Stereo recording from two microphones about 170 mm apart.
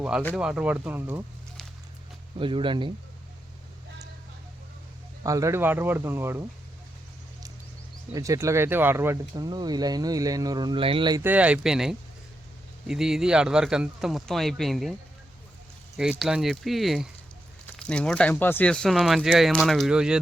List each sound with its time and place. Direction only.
0.3 s speech: 5° right (ahead or behind)
2.4 s speech: 30° right (ahead or behind)
5.2 s speech: 20° right (ahead or behind)
8.1 s speech: 20° right (ahead or behind)
11.2 s speech: 10° right (ahead or behind)
16.0 s speech: 5° right (ahead or behind)